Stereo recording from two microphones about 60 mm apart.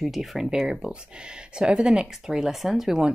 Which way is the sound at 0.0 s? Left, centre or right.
Centre.